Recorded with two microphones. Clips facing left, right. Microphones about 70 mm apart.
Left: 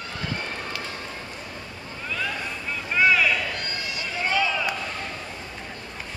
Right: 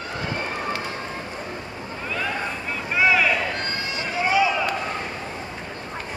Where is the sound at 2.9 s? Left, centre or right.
Centre.